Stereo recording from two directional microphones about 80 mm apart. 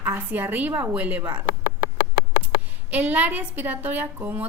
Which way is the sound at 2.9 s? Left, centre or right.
Right.